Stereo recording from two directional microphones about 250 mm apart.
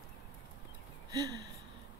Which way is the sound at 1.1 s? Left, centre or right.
Centre.